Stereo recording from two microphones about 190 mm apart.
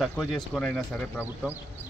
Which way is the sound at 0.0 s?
Centre (ahead or behind).